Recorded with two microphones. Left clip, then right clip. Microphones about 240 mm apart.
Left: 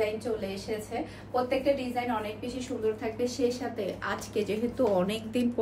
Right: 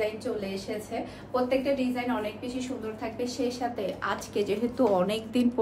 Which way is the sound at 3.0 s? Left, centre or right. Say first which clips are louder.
Left 2 dB; centre.